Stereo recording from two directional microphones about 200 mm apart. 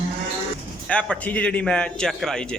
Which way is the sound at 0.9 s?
5° left (ahead or behind).